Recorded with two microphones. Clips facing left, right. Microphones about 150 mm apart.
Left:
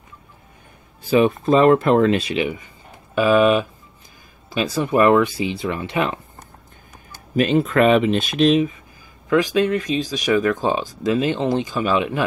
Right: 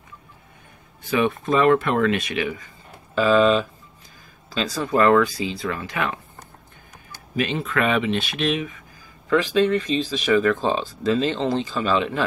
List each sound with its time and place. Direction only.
1.1 s speech: 30° left (ahead or behind)
7.3 s speech: 40° left (ahead or behind)
9.3 s speech: 10° left (ahead or behind)